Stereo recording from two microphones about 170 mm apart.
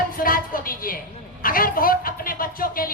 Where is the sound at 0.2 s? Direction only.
55° left (ahead or behind).